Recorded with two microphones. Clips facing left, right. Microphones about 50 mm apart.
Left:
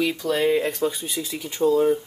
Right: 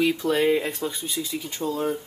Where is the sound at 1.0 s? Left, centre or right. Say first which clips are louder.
Even; left.